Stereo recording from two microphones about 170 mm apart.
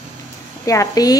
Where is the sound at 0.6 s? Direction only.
20° left (ahead or behind).